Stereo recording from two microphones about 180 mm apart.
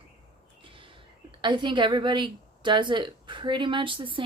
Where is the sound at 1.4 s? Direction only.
25° right (ahead or behind).